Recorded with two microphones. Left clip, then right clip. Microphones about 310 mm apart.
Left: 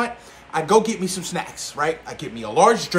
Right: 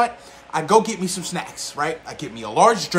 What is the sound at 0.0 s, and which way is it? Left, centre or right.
Speech, centre.